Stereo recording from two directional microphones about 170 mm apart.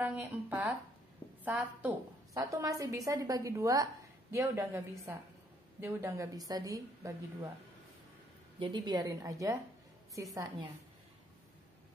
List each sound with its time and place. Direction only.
0.0 s a woman's voice: 10° right (ahead or behind)
8.5 s a woman's voice: 25° right (ahead or behind)